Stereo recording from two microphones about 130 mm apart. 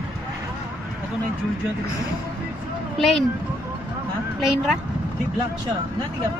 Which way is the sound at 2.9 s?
Centre (ahead or behind).